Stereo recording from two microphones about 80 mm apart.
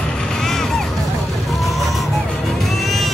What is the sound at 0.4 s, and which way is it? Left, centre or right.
Music, centre.